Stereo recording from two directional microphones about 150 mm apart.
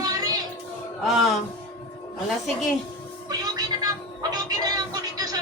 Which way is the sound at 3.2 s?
25° right (ahead or behind).